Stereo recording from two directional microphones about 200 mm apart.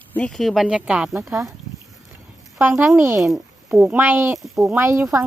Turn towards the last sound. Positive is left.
turn(degrees=-15)  # may be behind; listen again after turning